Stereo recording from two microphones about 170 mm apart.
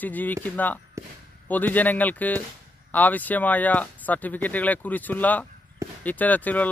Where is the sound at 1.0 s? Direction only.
15° right (ahead or behind).